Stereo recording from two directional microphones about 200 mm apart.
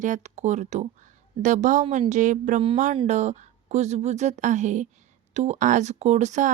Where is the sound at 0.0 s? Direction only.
35° right (ahead or behind).